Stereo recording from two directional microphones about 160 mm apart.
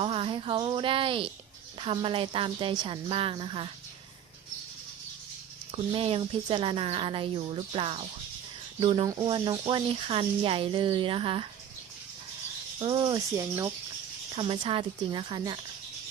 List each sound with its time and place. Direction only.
0.0 s speech: 35° right (ahead or behind)
5.7 s speech: 35° right (ahead or behind)
12.8 s speech: 30° right (ahead or behind)